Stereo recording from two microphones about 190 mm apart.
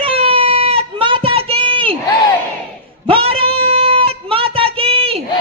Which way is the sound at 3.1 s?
30° right (ahead or behind).